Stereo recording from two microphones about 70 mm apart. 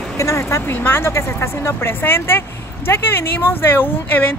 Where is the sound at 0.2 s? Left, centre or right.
Left.